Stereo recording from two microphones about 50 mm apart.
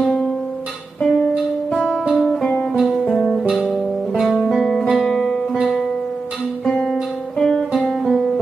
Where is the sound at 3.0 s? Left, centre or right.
Centre.